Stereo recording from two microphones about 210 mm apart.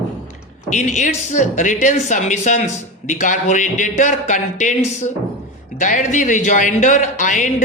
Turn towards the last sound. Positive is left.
turn(degrees=35)  # may be behind; listen again after turning